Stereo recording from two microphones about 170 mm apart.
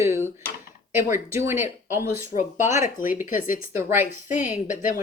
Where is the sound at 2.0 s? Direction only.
50° left (ahead or behind).